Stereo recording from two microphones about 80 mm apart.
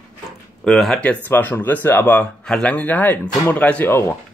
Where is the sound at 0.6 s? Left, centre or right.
Centre.